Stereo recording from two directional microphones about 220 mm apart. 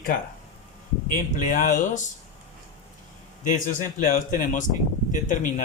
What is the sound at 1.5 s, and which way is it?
Speech, 40° left (ahead or behind).